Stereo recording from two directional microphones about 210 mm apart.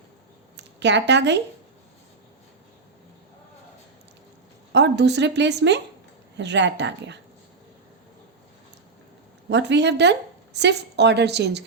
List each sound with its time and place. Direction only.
0.5 s speech: 55° right (ahead or behind)
4.7 s a woman's voice: 55° right (ahead or behind)
9.5 s a woman's voice: 55° right (ahead or behind)